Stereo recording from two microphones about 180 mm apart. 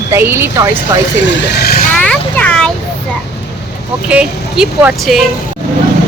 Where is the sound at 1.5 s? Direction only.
60° left (ahead or behind).